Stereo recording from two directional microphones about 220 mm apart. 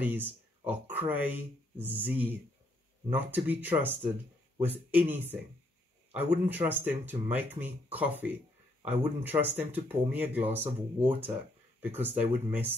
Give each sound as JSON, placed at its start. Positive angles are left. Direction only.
{"t": 0.0, "sound": "speech", "side_deg": -10}